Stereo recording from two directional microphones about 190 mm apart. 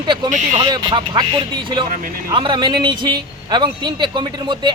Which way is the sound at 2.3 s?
25° right (ahead or behind).